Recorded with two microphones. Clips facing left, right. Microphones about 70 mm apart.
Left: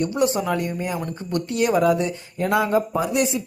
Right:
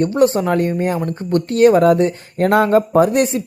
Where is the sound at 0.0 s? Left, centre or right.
Right.